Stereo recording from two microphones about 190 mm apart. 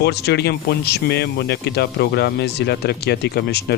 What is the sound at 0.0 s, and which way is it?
Speech, 60° left (ahead or behind).